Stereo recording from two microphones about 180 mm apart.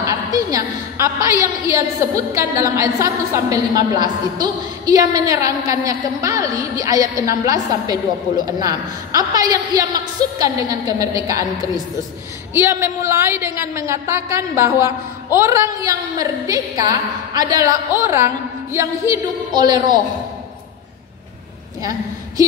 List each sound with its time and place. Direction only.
0.0 s a woman's voice: 20° right (ahead or behind)